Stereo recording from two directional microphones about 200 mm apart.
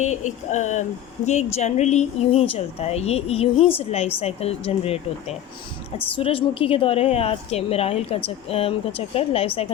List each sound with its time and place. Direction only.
0.0 s a woman's voice: 35° left (ahead or behind)
6.1 s a woman's voice: 30° left (ahead or behind)